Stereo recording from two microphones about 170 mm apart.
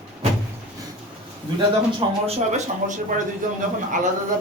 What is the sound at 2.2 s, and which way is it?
Speech, 40° right (ahead or behind).